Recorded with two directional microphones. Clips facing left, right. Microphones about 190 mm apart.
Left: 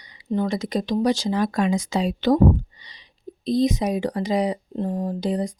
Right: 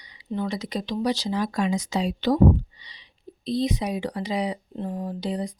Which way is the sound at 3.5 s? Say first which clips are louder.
Left 5 dB; 45° left (ahead or behind).